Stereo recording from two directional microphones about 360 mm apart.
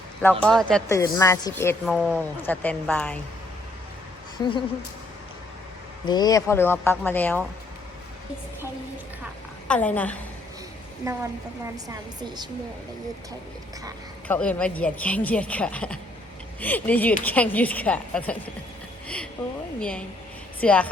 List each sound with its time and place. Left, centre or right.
0.4 s a woman's voice: centre
4.4 s speech: centre
6.1 s a woman's voice: centre
9.6 s a woman's voice: centre
11.0 s a woman's voice: centre
14.3 s a woman's voice: centre
20.6 s a woman's voice: centre